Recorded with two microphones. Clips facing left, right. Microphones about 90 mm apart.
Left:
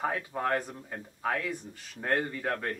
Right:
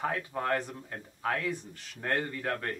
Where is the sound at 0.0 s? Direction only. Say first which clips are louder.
Left 1 dB; 5° left (ahead or behind).